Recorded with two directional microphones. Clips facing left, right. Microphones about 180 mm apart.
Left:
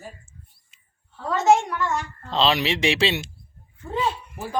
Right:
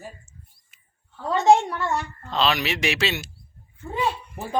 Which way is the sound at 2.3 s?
30° left (ahead or behind).